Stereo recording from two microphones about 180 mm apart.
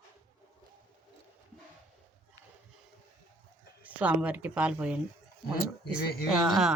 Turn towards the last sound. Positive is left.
turn(degrees=0)  # may be behind; listen again after turning